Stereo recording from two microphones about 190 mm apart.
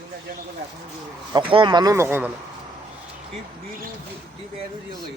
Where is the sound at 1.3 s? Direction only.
25° right (ahead or behind).